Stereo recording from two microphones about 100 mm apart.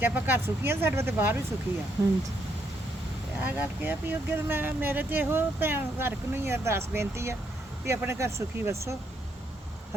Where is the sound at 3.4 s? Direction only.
15° right (ahead or behind).